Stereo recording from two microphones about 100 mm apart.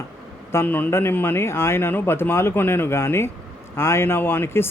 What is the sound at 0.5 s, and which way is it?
Speech, 20° left (ahead or behind).